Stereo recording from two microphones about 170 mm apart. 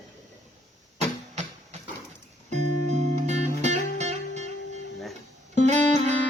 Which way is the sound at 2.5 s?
40° right (ahead or behind).